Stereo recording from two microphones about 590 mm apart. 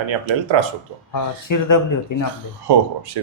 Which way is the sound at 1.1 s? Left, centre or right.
Left.